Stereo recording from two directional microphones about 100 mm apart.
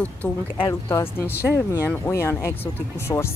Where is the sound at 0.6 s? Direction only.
30° left (ahead or behind).